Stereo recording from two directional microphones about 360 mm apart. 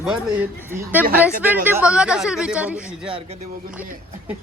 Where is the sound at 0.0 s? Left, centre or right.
Centre.